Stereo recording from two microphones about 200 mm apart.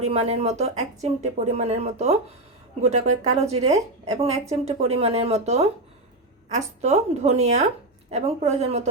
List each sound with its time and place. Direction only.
0.0 s speech: 30° right (ahead or behind)